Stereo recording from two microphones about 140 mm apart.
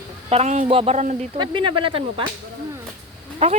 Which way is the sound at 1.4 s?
35° right (ahead or behind).